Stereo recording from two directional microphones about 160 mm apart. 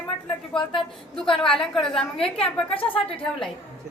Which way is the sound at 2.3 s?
35° left (ahead or behind).